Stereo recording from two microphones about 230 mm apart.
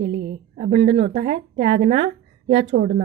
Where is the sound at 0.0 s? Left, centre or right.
Right.